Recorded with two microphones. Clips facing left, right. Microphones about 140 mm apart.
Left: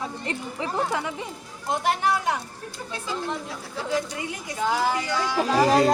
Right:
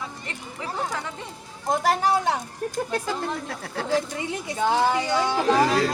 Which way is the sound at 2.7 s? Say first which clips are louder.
Right 4 dB; 50° right (ahead or behind).